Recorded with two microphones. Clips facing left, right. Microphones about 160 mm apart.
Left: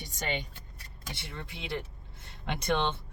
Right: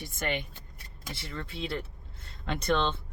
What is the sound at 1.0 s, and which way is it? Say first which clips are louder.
Speech: right 3 dB; 15° left (ahead or behind).